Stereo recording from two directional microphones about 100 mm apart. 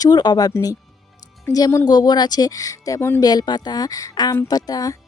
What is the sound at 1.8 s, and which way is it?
Speech, 45° left (ahead or behind).